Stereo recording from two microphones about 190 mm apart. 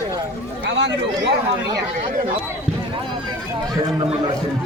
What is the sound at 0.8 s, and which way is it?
Speech, 70° right (ahead or behind).